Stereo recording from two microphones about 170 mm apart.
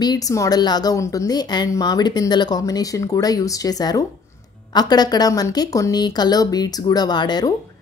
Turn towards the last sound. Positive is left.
turn(degrees=25)  # may be behind; listen again after turning